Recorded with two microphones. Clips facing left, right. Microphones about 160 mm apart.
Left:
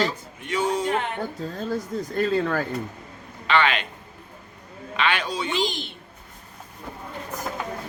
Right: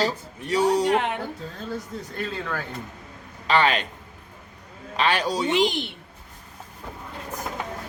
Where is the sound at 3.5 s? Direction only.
40° right (ahead or behind).